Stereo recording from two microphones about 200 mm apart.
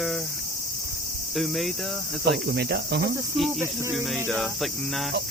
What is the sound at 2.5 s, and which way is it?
Cricket, 55° right (ahead or behind).